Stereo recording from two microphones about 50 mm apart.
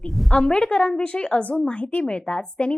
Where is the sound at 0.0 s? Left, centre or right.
Centre.